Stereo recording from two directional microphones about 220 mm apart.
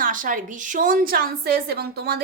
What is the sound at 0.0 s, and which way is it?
A woman's voice, 40° right (ahead or behind).